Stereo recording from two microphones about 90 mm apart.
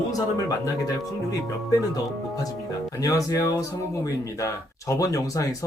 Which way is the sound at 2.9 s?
40° left (ahead or behind).